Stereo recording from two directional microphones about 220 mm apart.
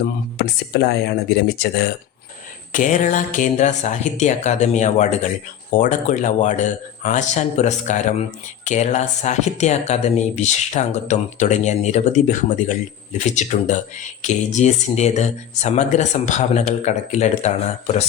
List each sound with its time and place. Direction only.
0.0 s speech: 50° left (ahead or behind)
2.7 s speech: 35° left (ahead or behind)